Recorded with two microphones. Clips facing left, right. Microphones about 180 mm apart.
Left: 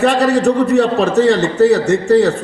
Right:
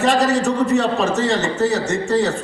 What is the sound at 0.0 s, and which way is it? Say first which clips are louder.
A man's voice: left 4 dB; 60° left (ahead or behind).